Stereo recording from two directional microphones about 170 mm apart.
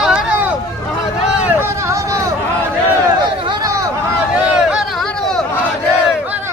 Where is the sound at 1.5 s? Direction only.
15° right (ahead or behind).